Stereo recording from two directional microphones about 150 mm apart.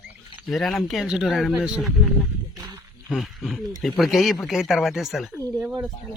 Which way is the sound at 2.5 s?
25° right (ahead or behind).